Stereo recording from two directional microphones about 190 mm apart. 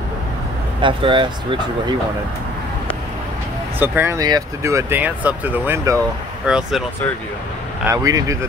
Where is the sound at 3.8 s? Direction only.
10° right (ahead or behind).